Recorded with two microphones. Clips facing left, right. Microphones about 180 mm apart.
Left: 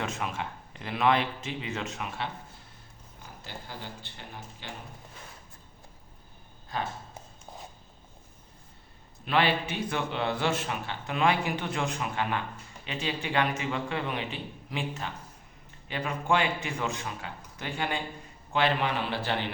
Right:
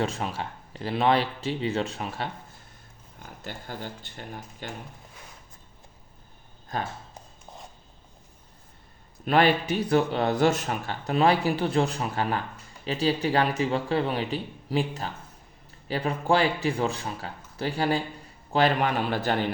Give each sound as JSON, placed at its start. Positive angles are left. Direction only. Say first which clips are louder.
{"t": 0.0, "sound": "a man's voice", "louder": "right 4 dB", "side_deg": -30}
{"t": 3.4, "sound": "speech", "louder": "right 5 dB", "side_deg": -50}
{"t": 6.7, "sound": "speech", "louder": "right 2 dB", "side_deg": -40}
{"t": 9.2, "sound": "a man's voice", "louder": "right 5 dB", "side_deg": -45}